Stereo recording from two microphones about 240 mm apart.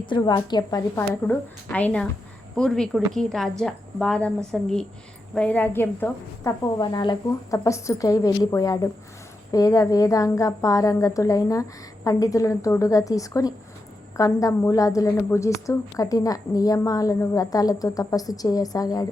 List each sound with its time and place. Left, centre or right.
0.0 s a woman's voice: centre